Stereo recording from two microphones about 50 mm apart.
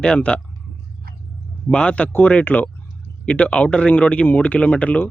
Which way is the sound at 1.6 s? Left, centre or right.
Left.